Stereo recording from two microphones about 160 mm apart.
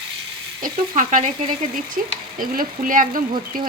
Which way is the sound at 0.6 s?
55° right (ahead or behind).